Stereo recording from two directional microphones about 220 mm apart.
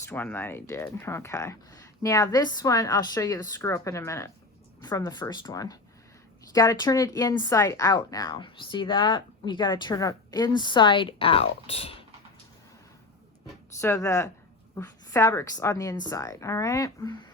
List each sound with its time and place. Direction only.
0.0 s speech: 10° left (ahead or behind); by 12.0 s 25° left (ahead or behind)
13.8 s speech: 15° left (ahead or behind)